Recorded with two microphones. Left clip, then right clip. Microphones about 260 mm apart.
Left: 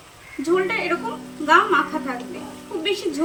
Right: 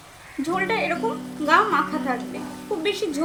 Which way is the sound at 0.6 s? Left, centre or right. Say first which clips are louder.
Right 1 dB; right.